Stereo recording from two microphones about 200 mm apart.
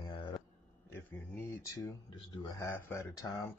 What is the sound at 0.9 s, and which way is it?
Speech, 10° left (ahead or behind).